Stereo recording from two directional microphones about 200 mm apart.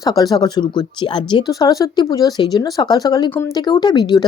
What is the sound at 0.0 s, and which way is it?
Speech, 20° left (ahead or behind).